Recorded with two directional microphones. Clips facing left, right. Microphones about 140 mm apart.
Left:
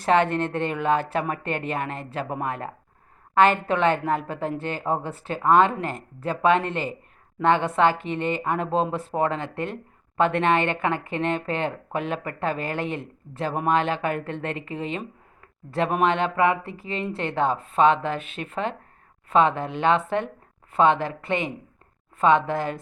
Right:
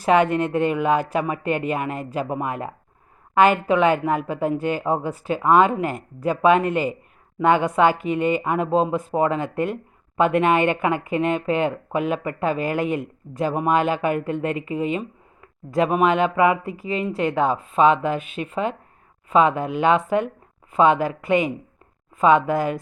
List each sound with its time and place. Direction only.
0.0 s speech: 10° right (ahead or behind)
16.6 s a woman's voice: 30° left (ahead or behind)
17.2 s speech: 10° right (ahead or behind)